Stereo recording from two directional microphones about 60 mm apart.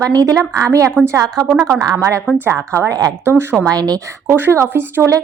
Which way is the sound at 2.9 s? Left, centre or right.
Right.